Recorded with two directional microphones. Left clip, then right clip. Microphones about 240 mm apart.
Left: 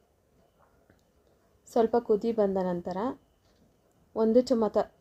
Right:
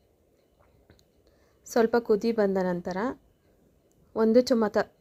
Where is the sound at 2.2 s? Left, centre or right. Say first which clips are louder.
Right 2 dB; centre.